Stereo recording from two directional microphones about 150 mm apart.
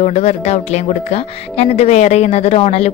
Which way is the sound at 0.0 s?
45° left (ahead or behind).